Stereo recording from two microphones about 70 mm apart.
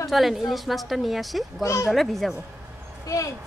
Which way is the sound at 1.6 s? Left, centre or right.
Left.